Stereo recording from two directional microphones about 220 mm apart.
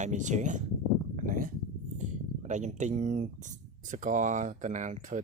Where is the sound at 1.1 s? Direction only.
40° right (ahead or behind).